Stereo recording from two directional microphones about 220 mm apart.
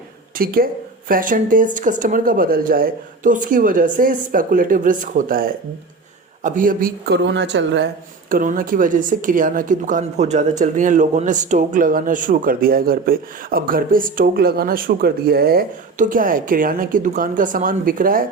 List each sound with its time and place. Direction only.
0.3 s speech: 40° right (ahead or behind)
8.3 s speech: 40° right (ahead or behind)